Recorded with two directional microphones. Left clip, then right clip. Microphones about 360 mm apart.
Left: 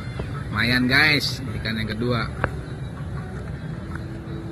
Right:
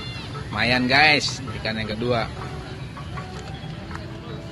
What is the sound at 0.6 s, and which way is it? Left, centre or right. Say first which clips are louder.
Speech: right 1 dB; centre.